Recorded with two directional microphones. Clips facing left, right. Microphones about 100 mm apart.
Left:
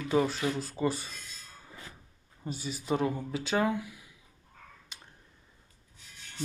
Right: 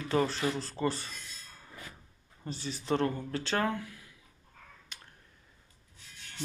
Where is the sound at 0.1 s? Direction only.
5° left (ahead or behind).